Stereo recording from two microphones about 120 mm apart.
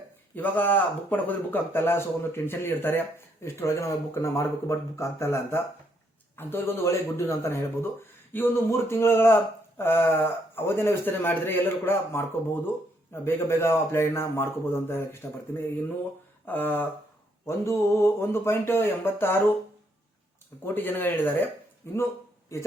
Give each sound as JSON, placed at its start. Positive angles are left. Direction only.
{"t": 0.3, "sound": "speech", "side_deg": 15}
{"t": 13.2, "sound": "speech", "side_deg": 20}
{"t": 20.7, "sound": "speech", "side_deg": 15}